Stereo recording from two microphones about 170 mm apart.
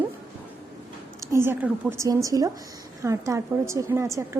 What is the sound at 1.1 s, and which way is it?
A woman's voice, 15° right (ahead or behind).